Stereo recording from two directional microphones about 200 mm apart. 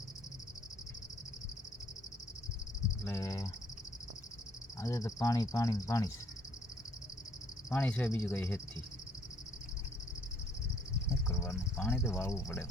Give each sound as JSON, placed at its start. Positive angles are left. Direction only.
{"t": 3.0, "sound": "speech", "side_deg": 15}
{"t": 4.8, "sound": "speech", "side_deg": 15}
{"t": 7.7, "sound": "speech", "side_deg": 5}
{"t": 11.3, "sound": "speech", "side_deg": 10}